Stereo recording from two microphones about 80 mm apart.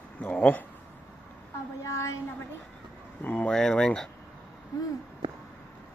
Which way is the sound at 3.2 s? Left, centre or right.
Centre.